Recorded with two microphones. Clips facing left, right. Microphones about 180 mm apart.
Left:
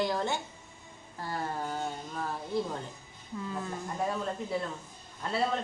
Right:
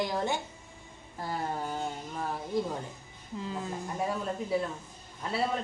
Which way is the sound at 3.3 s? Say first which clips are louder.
Even; 25° right (ahead or behind).